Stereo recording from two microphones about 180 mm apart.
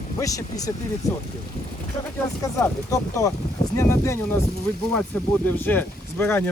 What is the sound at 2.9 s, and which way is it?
Speech, 20° left (ahead or behind).